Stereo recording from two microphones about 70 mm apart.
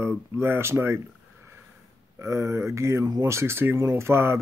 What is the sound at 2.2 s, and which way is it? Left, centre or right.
Speech, right.